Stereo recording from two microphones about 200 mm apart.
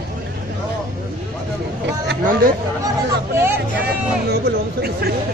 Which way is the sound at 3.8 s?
55° right (ahead or behind).